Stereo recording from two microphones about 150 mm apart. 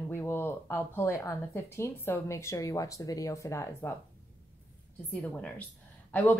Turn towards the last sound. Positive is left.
turn(degrees=10)  # may be behind; listen again after turning